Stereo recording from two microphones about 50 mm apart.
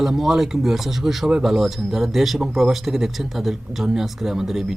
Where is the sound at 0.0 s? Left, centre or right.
Centre.